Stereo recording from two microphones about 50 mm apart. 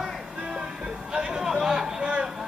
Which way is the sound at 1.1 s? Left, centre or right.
Centre.